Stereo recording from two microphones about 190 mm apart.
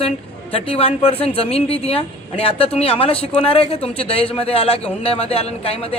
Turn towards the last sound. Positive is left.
turn(degrees=30)  # may be behind; listen again after turning